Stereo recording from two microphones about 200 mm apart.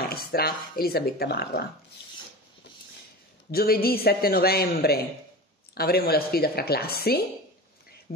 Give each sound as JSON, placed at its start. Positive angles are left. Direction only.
{"t": 0.0, "sound": "speech", "side_deg": 50}
{"t": 3.5, "sound": "speech", "side_deg": 50}